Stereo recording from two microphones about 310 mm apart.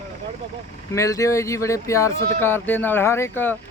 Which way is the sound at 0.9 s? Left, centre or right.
Centre.